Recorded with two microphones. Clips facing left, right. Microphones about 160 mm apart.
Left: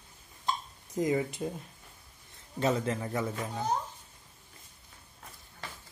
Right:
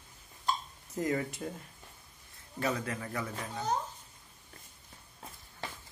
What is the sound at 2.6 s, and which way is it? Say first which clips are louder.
Speech: left 5 dB; 25° left (ahead or behind).